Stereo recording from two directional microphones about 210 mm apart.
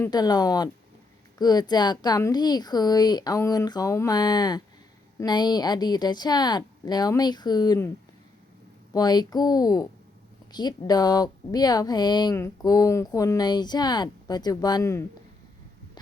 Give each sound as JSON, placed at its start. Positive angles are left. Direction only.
{"t": 0.0, "sound": "a woman's voice", "side_deg": 20}
{"t": 8.9, "sound": "a woman's voice", "side_deg": 20}